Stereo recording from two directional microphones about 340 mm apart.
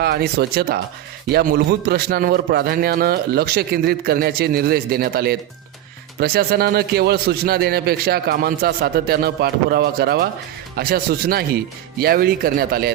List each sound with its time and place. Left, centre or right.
0.0 s a man's voice: right